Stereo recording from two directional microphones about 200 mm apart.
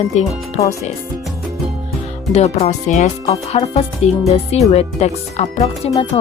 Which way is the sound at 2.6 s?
35° left (ahead or behind).